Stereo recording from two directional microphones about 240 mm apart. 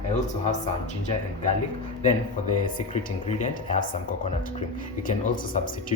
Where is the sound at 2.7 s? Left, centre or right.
Left.